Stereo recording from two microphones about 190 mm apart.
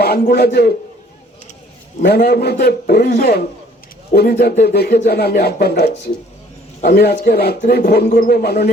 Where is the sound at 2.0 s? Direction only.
55° left (ahead or behind).